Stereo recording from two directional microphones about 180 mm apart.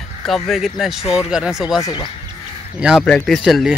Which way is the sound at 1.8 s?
20° left (ahead or behind).